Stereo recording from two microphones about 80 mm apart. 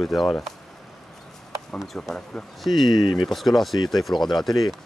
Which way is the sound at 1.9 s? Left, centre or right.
Centre.